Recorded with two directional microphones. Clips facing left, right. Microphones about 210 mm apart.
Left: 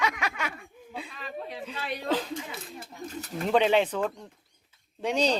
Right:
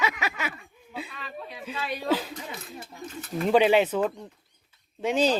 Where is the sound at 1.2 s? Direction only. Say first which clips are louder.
Left 2 dB; 45° left (ahead or behind).